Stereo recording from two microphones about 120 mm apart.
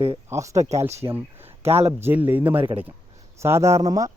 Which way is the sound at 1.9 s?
15° right (ahead or behind).